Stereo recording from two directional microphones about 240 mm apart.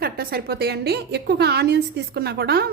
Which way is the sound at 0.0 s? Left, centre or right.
Right.